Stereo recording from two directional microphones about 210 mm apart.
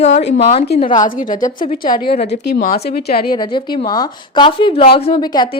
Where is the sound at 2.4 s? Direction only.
45° left (ahead or behind).